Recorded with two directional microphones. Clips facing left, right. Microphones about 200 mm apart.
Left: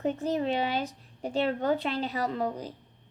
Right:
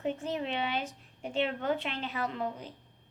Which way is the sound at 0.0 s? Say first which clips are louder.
Left 5 dB; 40° left (ahead or behind).